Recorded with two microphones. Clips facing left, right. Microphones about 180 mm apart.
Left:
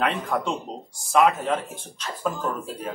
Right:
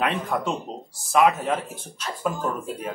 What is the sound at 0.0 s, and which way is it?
Speech, 10° right (ahead or behind).